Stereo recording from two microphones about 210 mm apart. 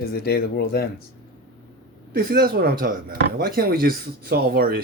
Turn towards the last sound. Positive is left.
turn(degrees=-45)  # may be behind; listen again after turning